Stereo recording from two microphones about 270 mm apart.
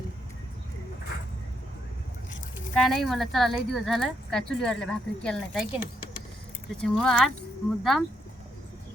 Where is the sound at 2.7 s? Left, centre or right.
Centre.